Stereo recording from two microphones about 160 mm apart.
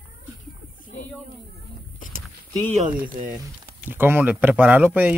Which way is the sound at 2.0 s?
60° left (ahead or behind).